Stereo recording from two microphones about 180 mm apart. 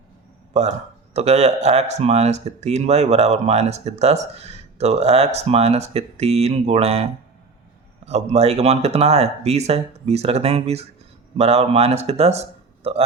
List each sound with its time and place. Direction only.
1.1 s speech: 35° right (ahead or behind)